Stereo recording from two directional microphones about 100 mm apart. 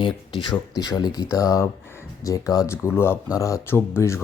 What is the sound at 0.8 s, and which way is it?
Speech, 45° left (ahead or behind).